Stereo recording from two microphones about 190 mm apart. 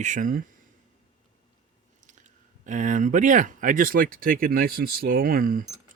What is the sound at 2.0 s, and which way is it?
Speech, 40° right (ahead or behind).